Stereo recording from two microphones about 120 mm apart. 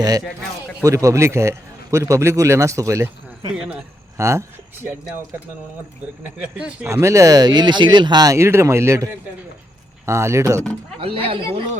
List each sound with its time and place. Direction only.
0.9 s speech: 25° right (ahead or behind)
3.5 s speech: 10° right (ahead or behind)
4.2 s speech: 20° right (ahead or behind)
6.4 s speech: 10° right (ahead or behind)
6.8 s speech: 25° right (ahead or behind)
11.0 s speech: 50° right (ahead or behind)